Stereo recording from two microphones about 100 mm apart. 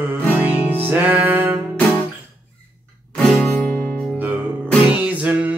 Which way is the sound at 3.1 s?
Centre (ahead or behind).